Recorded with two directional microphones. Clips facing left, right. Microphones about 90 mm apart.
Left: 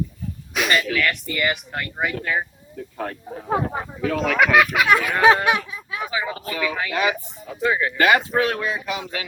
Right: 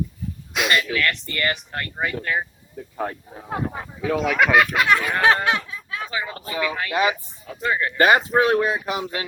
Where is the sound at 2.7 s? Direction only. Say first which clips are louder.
Right 1 dB; 15° right (ahead or behind).